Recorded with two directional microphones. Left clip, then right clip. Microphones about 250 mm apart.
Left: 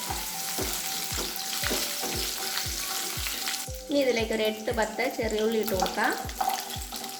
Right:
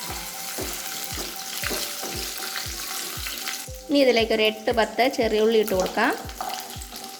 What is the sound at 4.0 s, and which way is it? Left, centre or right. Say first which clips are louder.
Speech: right 6 dB; right.